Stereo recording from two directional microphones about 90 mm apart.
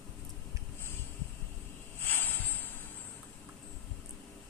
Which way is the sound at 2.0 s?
20° left (ahead or behind).